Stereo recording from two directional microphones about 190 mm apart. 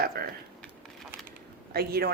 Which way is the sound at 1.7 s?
55° right (ahead or behind).